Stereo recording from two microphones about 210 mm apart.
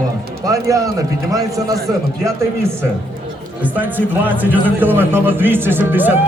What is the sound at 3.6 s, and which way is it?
A man's voice, 10° right (ahead or behind).